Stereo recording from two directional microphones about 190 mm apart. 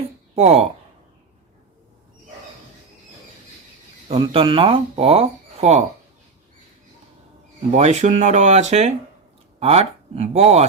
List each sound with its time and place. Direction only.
0.3 s speech: 35° right (ahead or behind)
4.1 s speech: 30° right (ahead or behind)
7.7 s speech: 35° right (ahead or behind)